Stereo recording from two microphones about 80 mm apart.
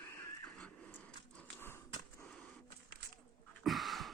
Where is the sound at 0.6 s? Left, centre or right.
Centre.